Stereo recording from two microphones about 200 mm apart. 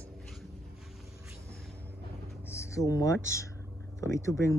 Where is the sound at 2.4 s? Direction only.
15° left (ahead or behind).